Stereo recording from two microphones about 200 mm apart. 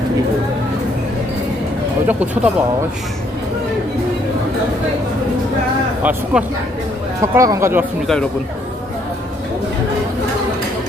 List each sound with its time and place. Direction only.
2.0 s speech: 5° right (ahead or behind)
6.0 s speech: 10° right (ahead or behind)
8.0 s speech: 5° left (ahead or behind)